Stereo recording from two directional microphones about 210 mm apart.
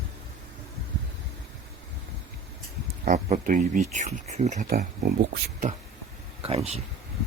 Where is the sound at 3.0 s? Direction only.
35° right (ahead or behind).